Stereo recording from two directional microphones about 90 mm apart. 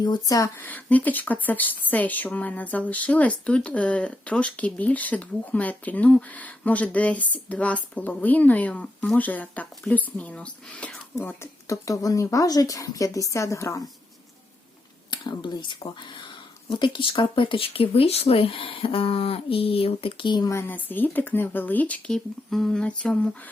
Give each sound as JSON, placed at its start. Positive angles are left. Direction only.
{"t": 0.0, "sound": "speech", "side_deg": 45}
{"t": 0.6, "sound": "speech", "side_deg": 20}
{"t": 11.7, "sound": "speech", "side_deg": 40}
{"t": 15.1, "sound": "speech", "side_deg": 55}
{"t": 20.5, "sound": "speech", "side_deg": 30}